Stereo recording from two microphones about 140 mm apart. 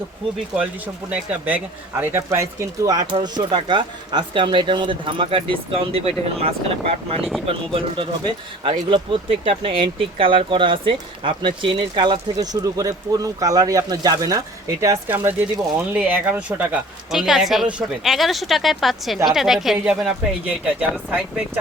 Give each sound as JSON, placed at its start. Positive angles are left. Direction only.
{"t": 1.1, "sound": "speech", "side_deg": -10}